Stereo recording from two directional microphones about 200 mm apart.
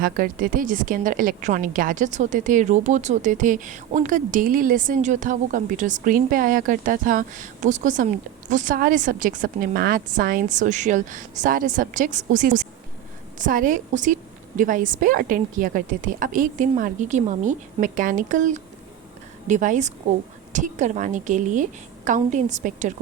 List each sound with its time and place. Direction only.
0.0 s a woman's voice: 45° right (ahead or behind)